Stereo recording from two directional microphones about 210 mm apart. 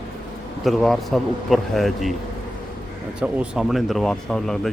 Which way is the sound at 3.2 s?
5° right (ahead or behind).